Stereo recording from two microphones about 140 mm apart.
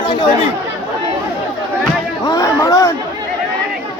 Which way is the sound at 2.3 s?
25° left (ahead or behind).